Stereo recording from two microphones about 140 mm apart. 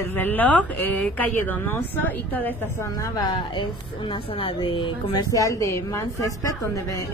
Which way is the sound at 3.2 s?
35° left (ahead or behind).